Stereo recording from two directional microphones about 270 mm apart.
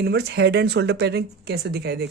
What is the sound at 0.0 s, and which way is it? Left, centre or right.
Speech, right.